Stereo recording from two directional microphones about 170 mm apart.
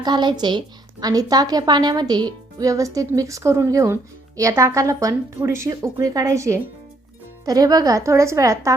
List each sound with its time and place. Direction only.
0.0 s a woman's voice: 25° right (ahead or behind)